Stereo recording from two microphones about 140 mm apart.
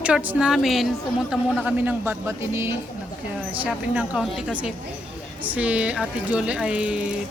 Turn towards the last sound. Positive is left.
turn(degrees=-5)  # may be behind; listen again after turning